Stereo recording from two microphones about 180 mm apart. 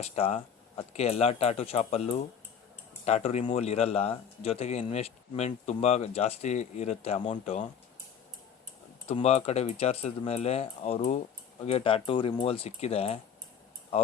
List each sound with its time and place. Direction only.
0.0 s speech: 35° left (ahead or behind)
9.0 s speech: 35° left (ahead or behind)